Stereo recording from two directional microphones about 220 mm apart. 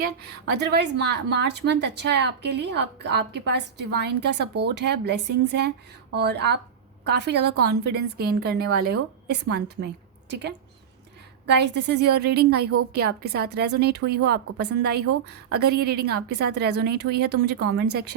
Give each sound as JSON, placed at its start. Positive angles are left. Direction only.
{"t": 0.0, "sound": "a woman's voice", "side_deg": -50}